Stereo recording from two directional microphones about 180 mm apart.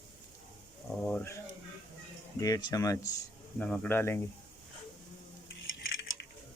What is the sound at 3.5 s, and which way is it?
Speech, 10° left (ahead or behind).